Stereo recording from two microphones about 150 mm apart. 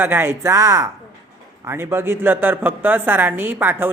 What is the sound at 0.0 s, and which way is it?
A woman's voice, 15° right (ahead or behind).